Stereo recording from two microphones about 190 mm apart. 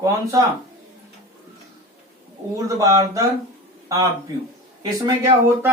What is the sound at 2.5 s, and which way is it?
Speech, 15° right (ahead or behind).